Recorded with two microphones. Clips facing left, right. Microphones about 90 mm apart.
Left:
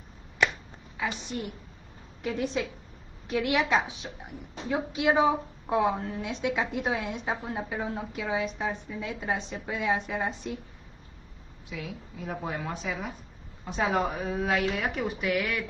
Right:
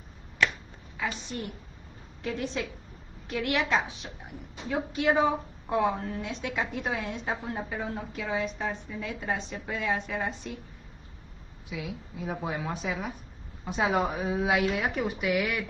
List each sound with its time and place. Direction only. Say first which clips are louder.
0.9 s a woman's voice: left 1 dB; 15° left (ahead or behind)
11.7 s a woman's voice: right 1 dB; 5° right (ahead or behind)